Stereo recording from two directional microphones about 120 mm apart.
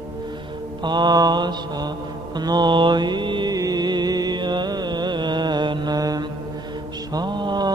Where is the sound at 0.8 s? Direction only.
35° right (ahead or behind).